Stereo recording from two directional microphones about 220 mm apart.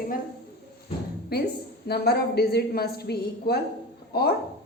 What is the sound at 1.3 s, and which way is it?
A woman's voice, 45° left (ahead or behind).